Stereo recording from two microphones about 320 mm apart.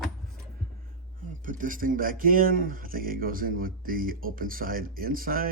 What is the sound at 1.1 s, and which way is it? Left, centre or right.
Speech, right.